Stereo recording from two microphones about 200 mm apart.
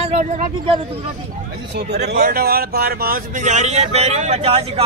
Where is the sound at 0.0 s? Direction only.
35° right (ahead or behind).